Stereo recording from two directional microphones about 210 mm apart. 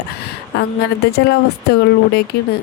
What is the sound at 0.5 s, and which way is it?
Speech, 50° left (ahead or behind).